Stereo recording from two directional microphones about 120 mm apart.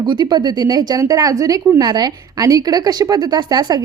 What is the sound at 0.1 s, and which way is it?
A woman's voice, 40° right (ahead or behind).